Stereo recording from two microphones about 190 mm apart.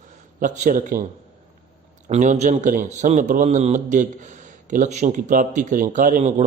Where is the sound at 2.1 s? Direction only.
40° right (ahead or behind).